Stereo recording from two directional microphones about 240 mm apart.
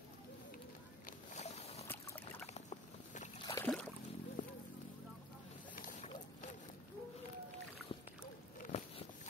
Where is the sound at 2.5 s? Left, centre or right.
Left.